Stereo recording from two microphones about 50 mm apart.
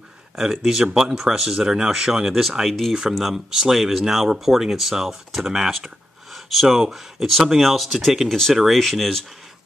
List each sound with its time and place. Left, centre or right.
0.4 s speech: centre
2.9 s speech: centre
8.3 s speech: centre